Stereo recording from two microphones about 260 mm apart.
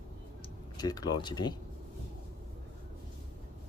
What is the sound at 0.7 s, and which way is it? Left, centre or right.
Speech, centre.